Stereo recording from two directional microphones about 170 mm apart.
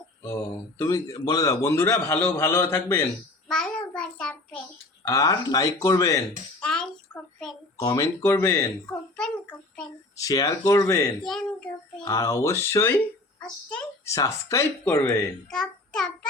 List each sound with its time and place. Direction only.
0.8 s a man's voice: 20° left (ahead or behind)
3.5 s child singing: 5° left (ahead or behind)
5.0 s speech: 20° left (ahead or behind)
6.6 s a sound: 5° left (ahead or behind)
7.8 s speech: 20° left (ahead or behind)
9.1 s a sound: 5° left (ahead or behind)
10.2 s speech: 20° left (ahead or behind)
11.3 s child singing: 5° left (ahead or behind)
12.0 s a man's voice: 20° left (ahead or behind)
13.7 s a sound: 5° left (ahead or behind)
14.1 s a man's voice: 20° left (ahead or behind)
15.4 s child singing: 5° left (ahead or behind)